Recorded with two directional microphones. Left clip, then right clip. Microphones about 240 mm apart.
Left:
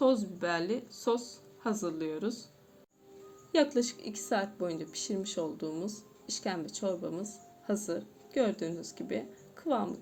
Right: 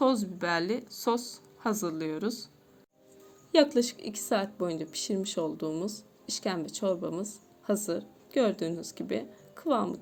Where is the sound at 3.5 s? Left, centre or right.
Right.